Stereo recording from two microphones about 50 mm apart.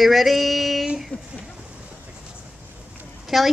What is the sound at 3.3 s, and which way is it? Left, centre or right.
Speech, centre.